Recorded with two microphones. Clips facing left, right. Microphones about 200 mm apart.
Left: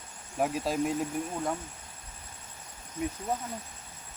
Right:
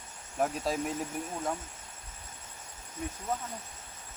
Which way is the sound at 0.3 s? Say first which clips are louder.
Left 2 dB; 5° left (ahead or behind).